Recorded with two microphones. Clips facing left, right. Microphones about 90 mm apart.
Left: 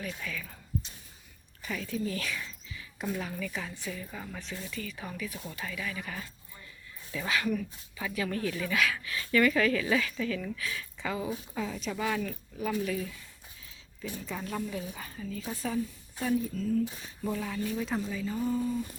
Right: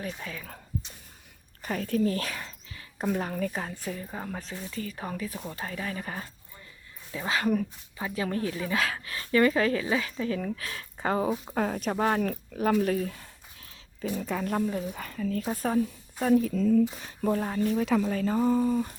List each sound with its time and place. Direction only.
0.0 s speech: 35° right (ahead or behind)
1.6 s speech: 45° right (ahead or behind)
7.1 s speech: 25° right (ahead or behind)
7.4 s speech: 45° right (ahead or behind)
8.0 s speech: 30° right (ahead or behind); by 16.3 s 50° right (ahead or behind)
17.0 s speech: 65° right (ahead or behind)